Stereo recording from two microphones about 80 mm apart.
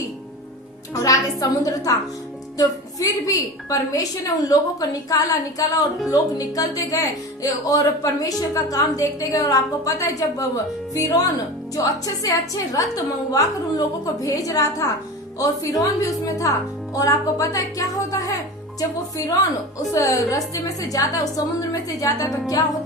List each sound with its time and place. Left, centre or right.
0.9 s a woman's voice: left